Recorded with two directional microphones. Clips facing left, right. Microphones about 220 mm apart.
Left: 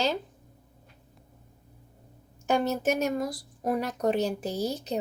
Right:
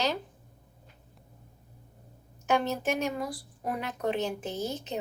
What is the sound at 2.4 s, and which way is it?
Speech, 40° left (ahead or behind).